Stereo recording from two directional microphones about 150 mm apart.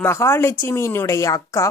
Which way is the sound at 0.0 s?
15° left (ahead or behind).